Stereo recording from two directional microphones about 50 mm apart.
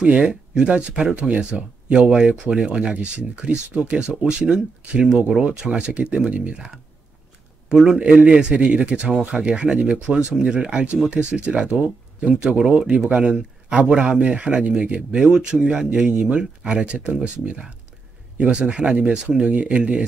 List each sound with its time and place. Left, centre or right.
0.0 s speech: right
5.6 s speech: centre
8.0 s speech: right